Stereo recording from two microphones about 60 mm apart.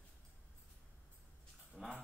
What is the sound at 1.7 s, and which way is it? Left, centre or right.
Dog, centre.